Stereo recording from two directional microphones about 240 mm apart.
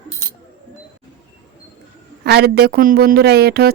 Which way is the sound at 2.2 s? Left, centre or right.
Right.